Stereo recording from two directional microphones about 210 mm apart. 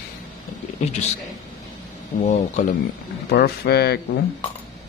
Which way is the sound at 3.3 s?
50° left (ahead or behind).